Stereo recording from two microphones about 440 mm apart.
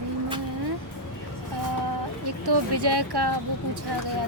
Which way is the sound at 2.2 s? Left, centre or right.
Right.